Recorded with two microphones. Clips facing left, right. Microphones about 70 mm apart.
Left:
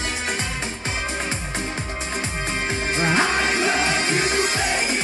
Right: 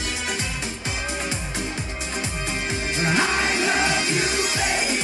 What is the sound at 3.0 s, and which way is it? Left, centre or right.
Music, left.